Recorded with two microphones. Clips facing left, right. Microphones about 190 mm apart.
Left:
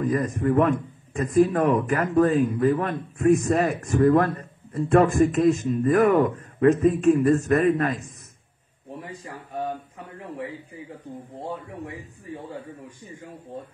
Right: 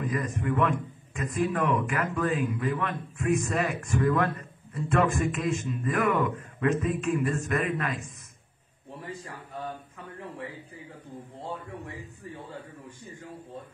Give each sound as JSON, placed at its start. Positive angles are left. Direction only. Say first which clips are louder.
{"t": 0.0, "sound": "a man's voice", "louder": "left 7 dB", "side_deg": 35}